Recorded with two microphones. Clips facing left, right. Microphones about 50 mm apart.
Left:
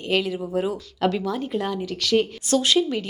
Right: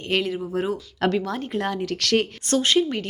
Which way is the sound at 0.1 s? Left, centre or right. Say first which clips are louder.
Left 1 dB; right.